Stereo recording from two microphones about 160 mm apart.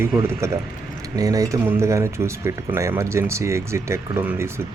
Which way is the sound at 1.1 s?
20° right (ahead or behind).